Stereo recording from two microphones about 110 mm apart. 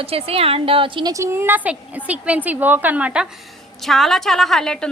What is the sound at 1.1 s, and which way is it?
A woman's voice, 25° right (ahead or behind).